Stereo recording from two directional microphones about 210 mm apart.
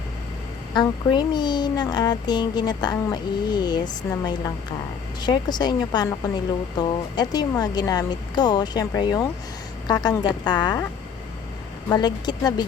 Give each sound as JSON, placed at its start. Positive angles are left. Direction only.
{"t": 0.7, "sound": "a woman's voice", "side_deg": 20}
{"t": 11.9, "sound": "a woman's voice", "side_deg": 20}